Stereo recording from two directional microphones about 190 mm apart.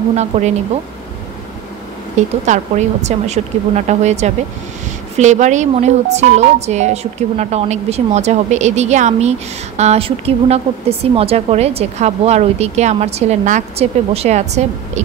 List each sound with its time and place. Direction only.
0.1 s a woman's voice: 35° right (ahead or behind)
2.1 s a woman's voice: 40° right (ahead or behind)